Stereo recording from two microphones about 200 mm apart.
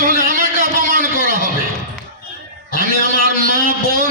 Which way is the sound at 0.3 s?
45° right (ahead or behind).